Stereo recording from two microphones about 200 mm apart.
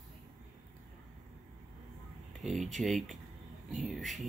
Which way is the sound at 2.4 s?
Centre (ahead or behind).